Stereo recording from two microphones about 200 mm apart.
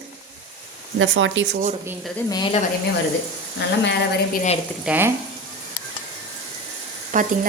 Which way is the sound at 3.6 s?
60° left (ahead or behind).